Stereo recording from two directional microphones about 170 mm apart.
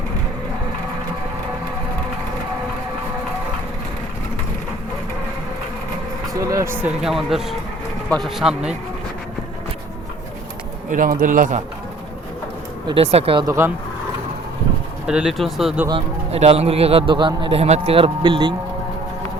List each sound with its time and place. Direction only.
6.3 s speech: 20° right (ahead or behind)
6.8 s speech: centre (ahead or behind)
10.8 s a man's voice: 50° right (ahead or behind)
12.9 s a man's voice: 35° right (ahead or behind)
15.0 s speech: 5° right (ahead or behind)
15.9 s a man's voice: 35° right (ahead or behind)